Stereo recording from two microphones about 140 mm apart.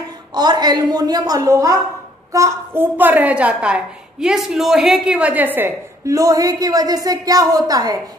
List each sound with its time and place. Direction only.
0.3 s a woman's voice: 30° right (ahead or behind)